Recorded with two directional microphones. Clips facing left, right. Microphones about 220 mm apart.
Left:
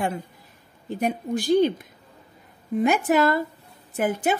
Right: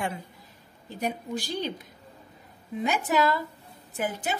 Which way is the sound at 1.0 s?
55° left (ahead or behind).